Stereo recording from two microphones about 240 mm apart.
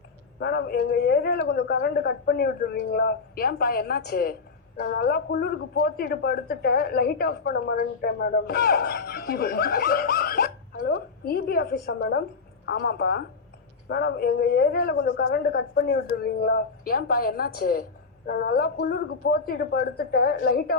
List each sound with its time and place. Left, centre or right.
0.3 s a woman's voice: left